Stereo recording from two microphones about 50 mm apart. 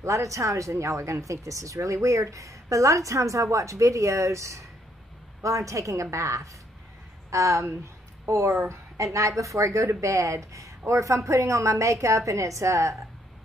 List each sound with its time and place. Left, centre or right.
0.0 s speech: right